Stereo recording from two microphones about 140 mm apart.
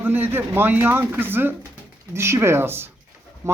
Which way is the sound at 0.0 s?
15° right (ahead or behind).